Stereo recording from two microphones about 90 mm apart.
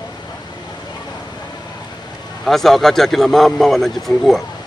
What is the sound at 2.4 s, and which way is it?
A man's voice, centre (ahead or behind).